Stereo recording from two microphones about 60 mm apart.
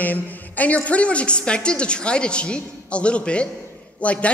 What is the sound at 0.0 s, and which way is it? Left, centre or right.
A woman's voice, left.